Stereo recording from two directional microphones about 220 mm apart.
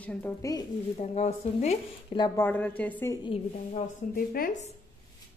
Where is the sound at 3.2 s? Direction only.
25° left (ahead or behind).